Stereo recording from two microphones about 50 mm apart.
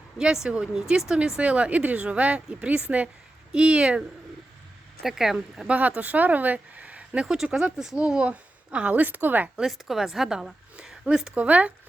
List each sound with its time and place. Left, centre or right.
0.2 s a woman's voice: centre
5.0 s speech: centre
5.6 s speech: right
7.2 s speech: centre
7.9 s speech: right
9.0 s a woman's voice: right
9.6 s a woman's voice: centre
11.3 s a woman's voice: right